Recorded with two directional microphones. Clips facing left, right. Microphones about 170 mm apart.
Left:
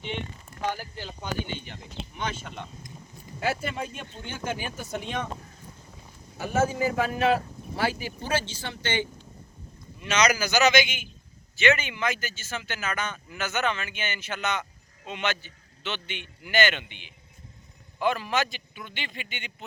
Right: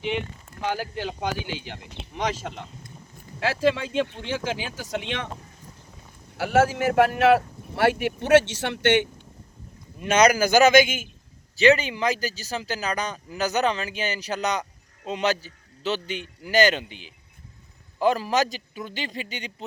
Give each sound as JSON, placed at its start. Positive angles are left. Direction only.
{"t": 0.7, "sound": "speech", "side_deg": -80}
{"t": 5.4, "sound": "boat", "side_deg": 0}
{"t": 6.3, "sound": "speech", "side_deg": -80}
{"t": 10.0, "sound": "a man's voice", "side_deg": -50}